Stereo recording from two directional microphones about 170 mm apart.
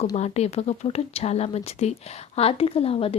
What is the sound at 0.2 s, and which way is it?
A woman's voice, 40° left (ahead or behind).